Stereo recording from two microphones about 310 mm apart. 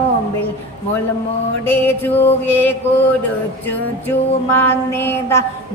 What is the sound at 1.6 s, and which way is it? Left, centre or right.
Child singing, centre.